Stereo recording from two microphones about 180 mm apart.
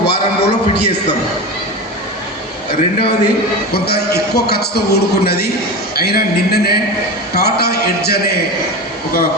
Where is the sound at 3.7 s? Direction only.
60° left (ahead or behind).